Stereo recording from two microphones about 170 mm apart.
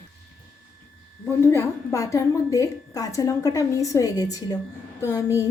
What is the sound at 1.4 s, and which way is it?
A woman's voice, 15° left (ahead or behind).